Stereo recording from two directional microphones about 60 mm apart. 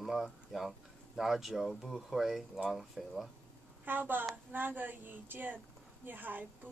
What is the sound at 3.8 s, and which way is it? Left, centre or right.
A woman's voice, right.